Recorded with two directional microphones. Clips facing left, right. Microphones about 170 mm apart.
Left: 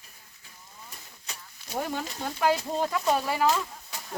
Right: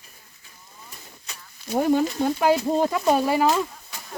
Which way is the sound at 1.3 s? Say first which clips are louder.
Even; 35° left (ahead or behind).